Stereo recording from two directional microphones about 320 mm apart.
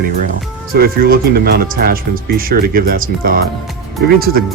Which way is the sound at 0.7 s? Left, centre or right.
Right.